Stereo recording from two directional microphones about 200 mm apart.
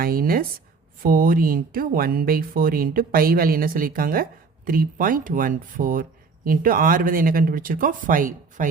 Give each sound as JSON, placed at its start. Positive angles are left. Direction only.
{"t": 0.0, "sound": "speech", "side_deg": -45}